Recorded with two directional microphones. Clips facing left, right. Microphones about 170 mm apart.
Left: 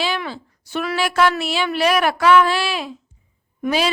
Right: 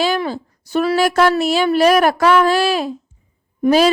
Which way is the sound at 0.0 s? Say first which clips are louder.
Right 6 dB; 45° right (ahead or behind).